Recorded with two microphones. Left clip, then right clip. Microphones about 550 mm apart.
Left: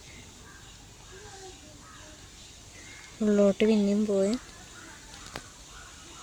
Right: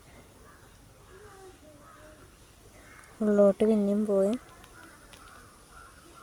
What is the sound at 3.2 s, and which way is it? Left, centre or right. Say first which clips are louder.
Speech: right 1 dB; right.